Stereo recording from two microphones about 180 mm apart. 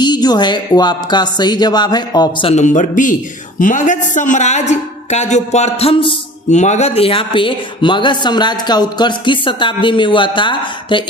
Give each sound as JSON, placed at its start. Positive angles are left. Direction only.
{"t": 0.0, "sound": "music", "side_deg": 25}
{"t": 2.6, "sound": "speech", "side_deg": 45}
{"t": 4.7, "sound": "music", "side_deg": 40}